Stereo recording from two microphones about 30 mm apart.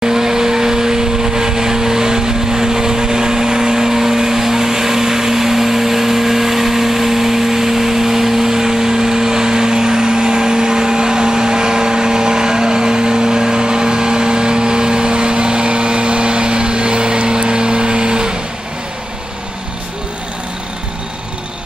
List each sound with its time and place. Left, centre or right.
0.0 s vehicle: centre